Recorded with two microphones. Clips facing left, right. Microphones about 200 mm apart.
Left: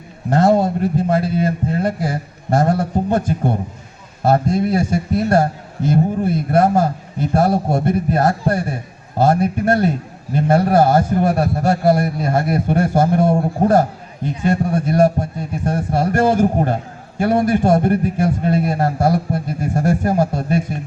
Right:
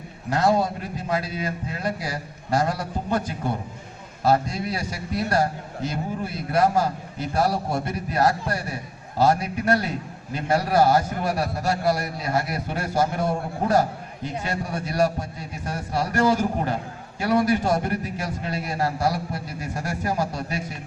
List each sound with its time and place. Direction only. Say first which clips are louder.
0.3 s a man's voice: left 7 dB; 50° left (ahead or behind)
14.4 s a man's voice: left 14 dB; 50° left (ahead or behind)